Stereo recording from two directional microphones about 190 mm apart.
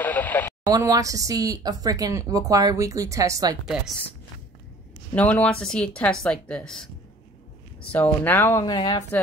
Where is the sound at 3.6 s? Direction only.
Centre (ahead or behind).